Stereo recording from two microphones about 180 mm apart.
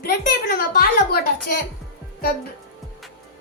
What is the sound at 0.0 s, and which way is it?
Speech, 55° left (ahead or behind).